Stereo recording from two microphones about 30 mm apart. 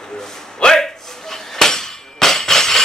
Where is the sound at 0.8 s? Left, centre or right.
Centre.